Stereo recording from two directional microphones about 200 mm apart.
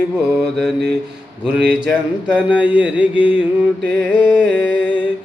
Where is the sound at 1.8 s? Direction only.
5° right (ahead or behind).